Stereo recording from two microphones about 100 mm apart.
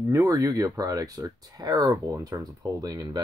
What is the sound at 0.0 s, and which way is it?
Speech, 30° right (ahead or behind).